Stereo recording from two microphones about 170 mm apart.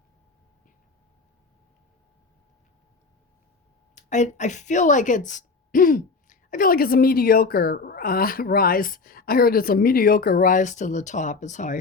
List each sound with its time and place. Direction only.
3.9 s a woman's voice: 45° left (ahead or behind)